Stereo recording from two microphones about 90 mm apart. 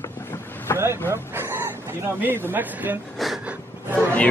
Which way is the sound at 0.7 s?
25° left (ahead or behind).